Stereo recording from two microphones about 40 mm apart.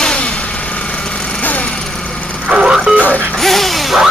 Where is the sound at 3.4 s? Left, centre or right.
Centre.